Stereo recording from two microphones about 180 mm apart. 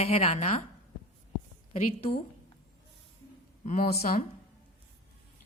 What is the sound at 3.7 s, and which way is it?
Speech, 50° left (ahead or behind).